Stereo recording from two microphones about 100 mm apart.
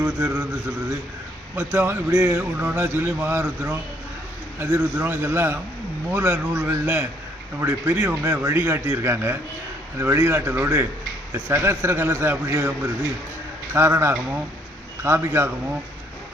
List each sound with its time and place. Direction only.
0.0 s a man's voice: 20° right (ahead or behind)
1.5 s a man's voice: 25° right (ahead or behind)
2.4 s a man's voice: 15° right (ahead or behind)